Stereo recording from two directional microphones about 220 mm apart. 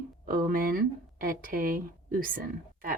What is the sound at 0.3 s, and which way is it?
Speech, 40° right (ahead or behind).